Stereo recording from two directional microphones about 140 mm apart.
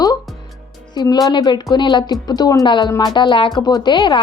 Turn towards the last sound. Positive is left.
turn(degrees=35)  # may be behind; listen again after turning